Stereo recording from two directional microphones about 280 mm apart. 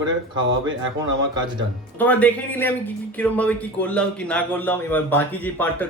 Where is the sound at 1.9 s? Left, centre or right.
Centre.